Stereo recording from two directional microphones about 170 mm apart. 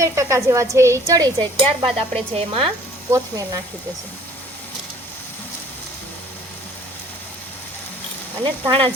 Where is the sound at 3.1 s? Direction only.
20° right (ahead or behind).